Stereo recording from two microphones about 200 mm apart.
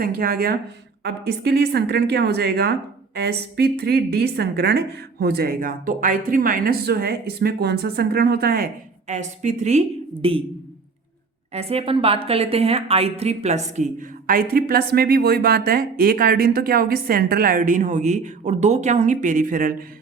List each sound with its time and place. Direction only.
0.0 s a woman's voice: 50° right (ahead or behind); by 10.4 s 30° right (ahead or behind)
11.5 s a woman's voice: 30° right (ahead or behind)